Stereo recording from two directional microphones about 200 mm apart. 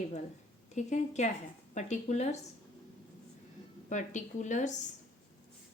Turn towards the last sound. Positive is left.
turn(degrees=35)  # may be behind; listen again after turning